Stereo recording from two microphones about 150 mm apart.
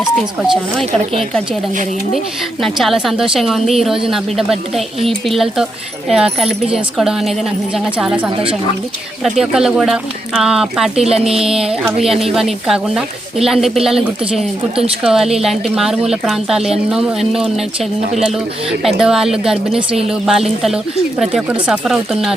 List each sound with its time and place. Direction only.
0.2 s speech: 5° right (ahead or behind)
2.1 s speech: centre (ahead or behind)
19.7 s speech: 40° right (ahead or behind)
20.1 s speech: centre (ahead or behind)